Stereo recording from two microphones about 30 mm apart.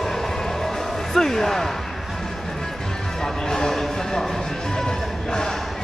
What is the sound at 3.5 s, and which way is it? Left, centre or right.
Music, centre.